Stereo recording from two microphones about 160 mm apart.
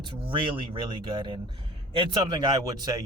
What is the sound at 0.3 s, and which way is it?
Speech, 30° right (ahead or behind).